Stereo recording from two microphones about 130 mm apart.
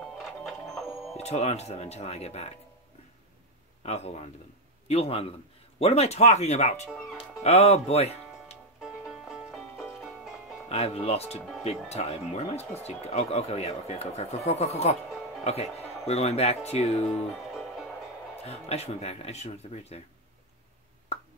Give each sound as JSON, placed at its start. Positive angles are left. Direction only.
{"t": 0.2, "sound": "music", "side_deg": 0}
{"t": 1.1, "sound": "speech", "side_deg": 55}
{"t": 3.8, "sound": "speech", "side_deg": 55}
{"t": 6.9, "sound": "speech", "side_deg": -5}
{"t": 7.4, "sound": "speech", "side_deg": 55}
{"t": 8.8, "sound": "music", "side_deg": -5}
{"t": 10.7, "sound": "speech", "side_deg": 50}
{"t": 16.1, "sound": "speech", "side_deg": 55}
{"t": 17.6, "sound": "music", "side_deg": 0}
{"t": 18.4, "sound": "speech", "side_deg": 55}